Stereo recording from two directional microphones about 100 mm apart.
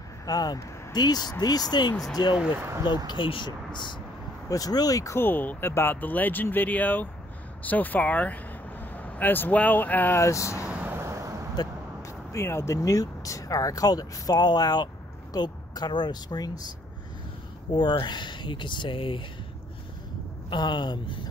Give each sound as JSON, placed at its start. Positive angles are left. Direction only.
{"t": 0.3, "sound": "speech", "side_deg": 40}
{"t": 3.1, "sound": "speech", "side_deg": 55}
{"t": 4.5, "sound": "speech", "side_deg": 40}
{"t": 5.2, "sound": "speech", "side_deg": 20}
{"t": 10.2, "sound": "speech", "side_deg": 30}
{"t": 10.6, "sound": "vehicle", "side_deg": -20}
{"t": 11.0, "sound": "a sound", "side_deg": -30}
{"t": 11.5, "sound": "speech", "side_deg": 40}
{"t": 17.7, "sound": "speech", "side_deg": 50}
{"t": 20.4, "sound": "speech", "side_deg": 50}